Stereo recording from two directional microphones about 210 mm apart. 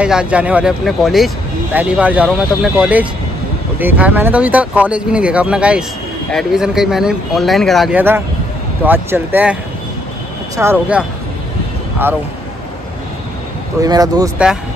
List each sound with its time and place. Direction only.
0.0 s speech: 5° right (ahead or behind)
13.7 s speech: 15° right (ahead or behind)